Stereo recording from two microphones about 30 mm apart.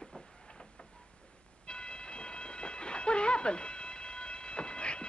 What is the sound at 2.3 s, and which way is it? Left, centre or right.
Cat, left.